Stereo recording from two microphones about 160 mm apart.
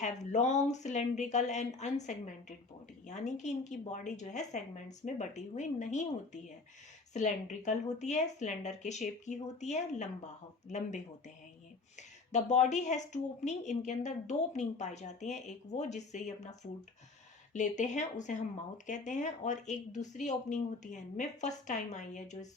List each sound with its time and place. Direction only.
0.0 s a woman's voice: 45° left (ahead or behind)